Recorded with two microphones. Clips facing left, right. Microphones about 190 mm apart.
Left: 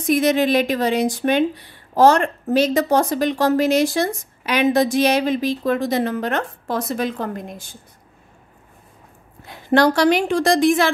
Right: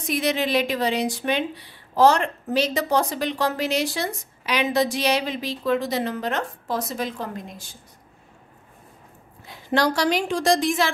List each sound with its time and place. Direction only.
0.0 s a woman's voice: 50° left (ahead or behind)
9.4 s a woman's voice: 55° left (ahead or behind)